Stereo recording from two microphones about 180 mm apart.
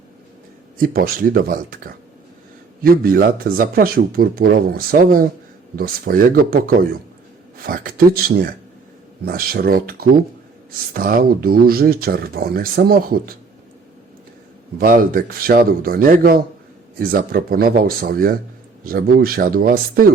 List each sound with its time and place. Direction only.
0.8 s speech: 55° right (ahead or behind)
14.8 s speech: 50° right (ahead or behind)